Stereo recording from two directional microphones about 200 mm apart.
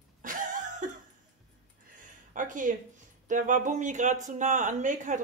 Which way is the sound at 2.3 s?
40° right (ahead or behind).